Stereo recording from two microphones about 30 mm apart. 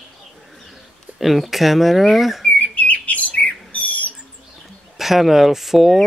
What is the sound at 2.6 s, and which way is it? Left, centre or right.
Bird, left.